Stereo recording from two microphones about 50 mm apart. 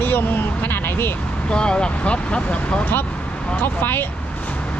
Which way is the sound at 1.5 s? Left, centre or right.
Centre.